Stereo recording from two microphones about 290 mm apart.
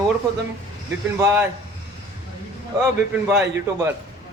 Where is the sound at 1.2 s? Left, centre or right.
Centre.